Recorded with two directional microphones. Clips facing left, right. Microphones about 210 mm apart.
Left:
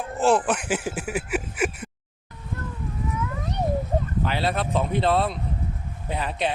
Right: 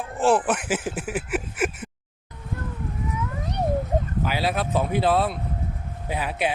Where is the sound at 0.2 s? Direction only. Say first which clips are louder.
Even; 5° right (ahead or behind).